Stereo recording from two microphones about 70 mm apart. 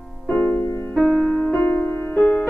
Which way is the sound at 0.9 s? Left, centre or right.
Centre.